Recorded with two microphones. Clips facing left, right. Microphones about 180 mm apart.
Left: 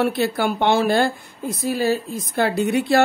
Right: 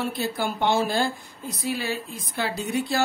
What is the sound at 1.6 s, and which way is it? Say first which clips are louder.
Speech: left 8 dB; 40° left (ahead or behind).